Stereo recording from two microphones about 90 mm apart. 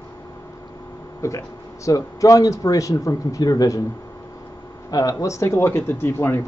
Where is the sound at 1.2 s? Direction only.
35° left (ahead or behind).